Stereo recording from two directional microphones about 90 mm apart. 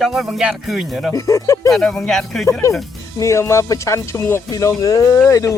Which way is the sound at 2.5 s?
35° left (ahead or behind).